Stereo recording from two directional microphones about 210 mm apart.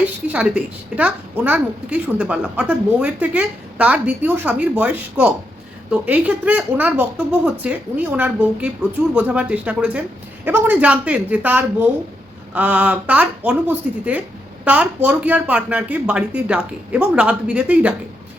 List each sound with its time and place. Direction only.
0.3 s speech: 5° right (ahead or behind)